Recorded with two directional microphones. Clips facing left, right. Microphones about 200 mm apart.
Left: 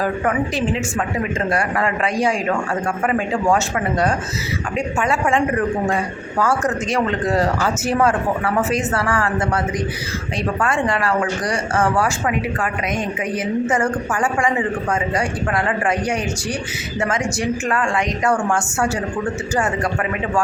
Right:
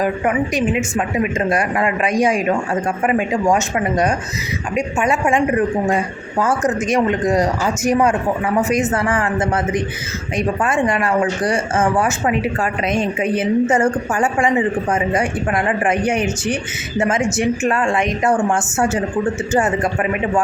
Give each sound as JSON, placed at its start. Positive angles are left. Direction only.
{"t": 0.0, "sound": "speech", "side_deg": -15}